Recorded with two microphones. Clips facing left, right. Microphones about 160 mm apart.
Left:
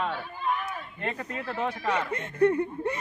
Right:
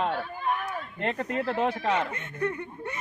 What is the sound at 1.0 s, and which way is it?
Speech, 60° right (ahead or behind).